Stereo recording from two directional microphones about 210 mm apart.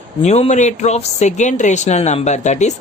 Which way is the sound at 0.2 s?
30° left (ahead or behind).